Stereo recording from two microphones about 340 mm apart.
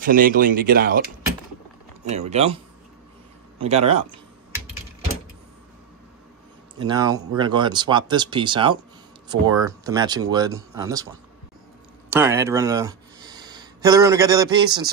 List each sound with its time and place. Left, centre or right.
0.0 s a man's voice: right
6.8 s speech: centre
12.1 s speech: centre